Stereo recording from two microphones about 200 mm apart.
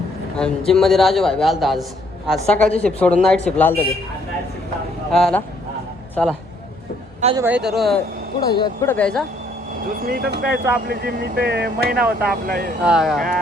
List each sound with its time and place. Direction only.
0.3 s a man's voice: 5° left (ahead or behind)
5.1 s a man's voice: centre (ahead or behind)
7.3 s a man's voice: 10° right (ahead or behind)
8.4 s speech: 20° left (ahead or behind)
10.1 s speech: 50° right (ahead or behind)
12.8 s a man's voice: 5° right (ahead or behind)